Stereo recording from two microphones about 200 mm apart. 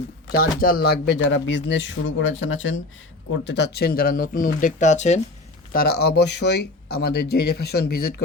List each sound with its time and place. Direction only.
0.3 s speech: 45° left (ahead or behind); by 2.3 s 70° left (ahead or behind)
2.4 s speech: 85° left
3.4 s speech: 60° left (ahead or behind); by 5.2 s 35° left (ahead or behind)
5.7 s speech: 50° left (ahead or behind)